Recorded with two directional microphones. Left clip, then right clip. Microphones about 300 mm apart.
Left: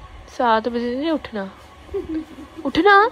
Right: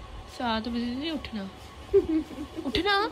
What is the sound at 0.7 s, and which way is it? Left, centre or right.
Speech, left.